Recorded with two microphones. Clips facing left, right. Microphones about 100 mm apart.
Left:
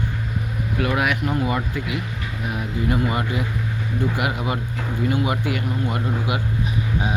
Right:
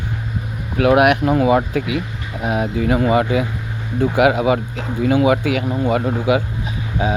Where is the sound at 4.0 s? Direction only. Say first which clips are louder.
Right 11 dB; 85° right.